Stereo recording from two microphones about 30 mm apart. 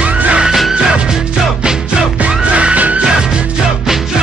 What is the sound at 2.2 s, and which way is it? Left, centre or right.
Music, right.